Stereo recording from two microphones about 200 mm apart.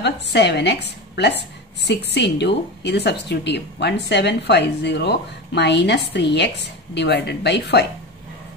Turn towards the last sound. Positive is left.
turn(degrees=60)  # may be behind; listen again after turning